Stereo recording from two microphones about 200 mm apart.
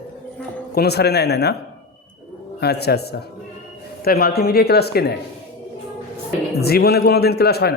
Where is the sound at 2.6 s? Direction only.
55° left (ahead or behind).